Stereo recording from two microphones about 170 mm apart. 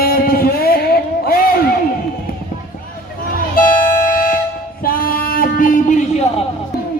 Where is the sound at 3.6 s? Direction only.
55° left (ahead or behind).